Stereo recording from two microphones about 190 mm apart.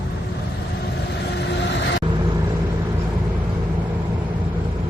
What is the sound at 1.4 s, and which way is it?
Vehicle, 65° left (ahead or behind).